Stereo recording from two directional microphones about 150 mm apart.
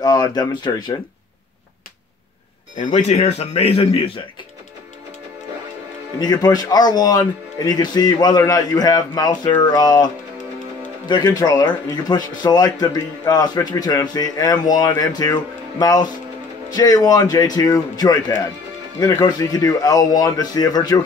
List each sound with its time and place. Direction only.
0.0 s speech: 30° left (ahead or behind)
2.8 s speech: 50° left (ahead or behind)
6.1 s a man's voice: 30° left (ahead or behind)